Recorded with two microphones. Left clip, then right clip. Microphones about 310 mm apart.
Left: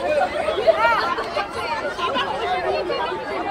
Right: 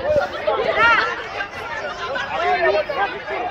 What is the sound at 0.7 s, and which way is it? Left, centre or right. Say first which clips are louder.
Chatter: right 3 dB; left.